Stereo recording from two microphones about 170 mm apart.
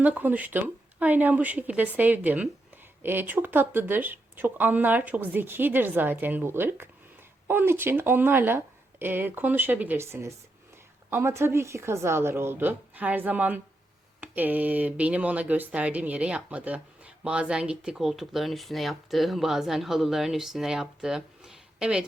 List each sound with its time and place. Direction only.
0.0 s speech: 10° right (ahead or behind)